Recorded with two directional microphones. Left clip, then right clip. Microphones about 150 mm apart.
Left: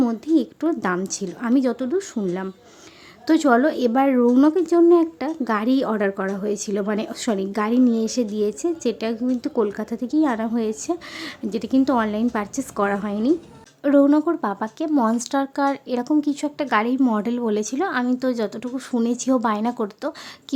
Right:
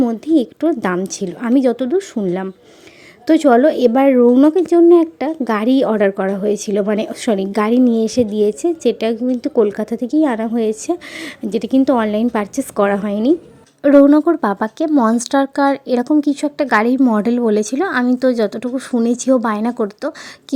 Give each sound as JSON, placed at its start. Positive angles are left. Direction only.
{"t": 0.0, "sound": "speech", "side_deg": -20}
{"t": 17.0, "sound": "speech", "side_deg": -20}
{"t": 17.2, "sound": "speech", "side_deg": -35}